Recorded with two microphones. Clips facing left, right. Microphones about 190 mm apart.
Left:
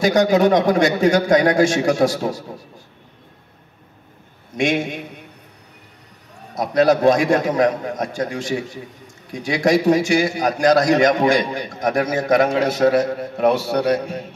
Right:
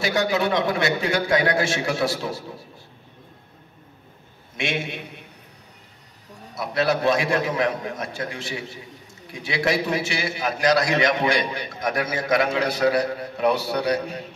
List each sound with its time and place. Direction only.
0.0 s a man's voice: 40° left (ahead or behind)
4.6 s a man's voice: 45° left (ahead or behind)
6.5 s a man's voice: 40° left (ahead or behind)